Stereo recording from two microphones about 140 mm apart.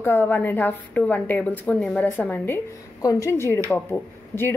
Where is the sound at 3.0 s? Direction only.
25° left (ahead or behind).